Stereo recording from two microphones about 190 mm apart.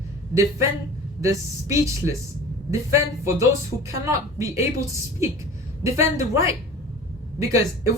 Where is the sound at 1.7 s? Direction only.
15° right (ahead or behind).